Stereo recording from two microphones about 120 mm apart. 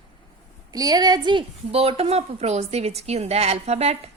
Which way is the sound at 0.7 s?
30° right (ahead or behind).